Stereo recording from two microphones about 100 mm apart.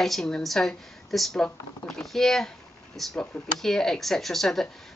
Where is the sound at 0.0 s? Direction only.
5° left (ahead or behind).